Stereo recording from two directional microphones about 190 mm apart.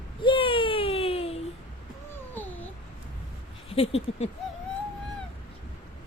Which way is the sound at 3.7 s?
30° left (ahead or behind).